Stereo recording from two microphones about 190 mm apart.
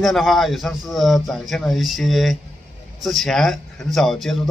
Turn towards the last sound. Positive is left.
turn(degrees=0)  # may be behind; listen again after turning